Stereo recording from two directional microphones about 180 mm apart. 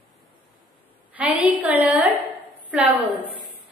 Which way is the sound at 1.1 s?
10° right (ahead or behind).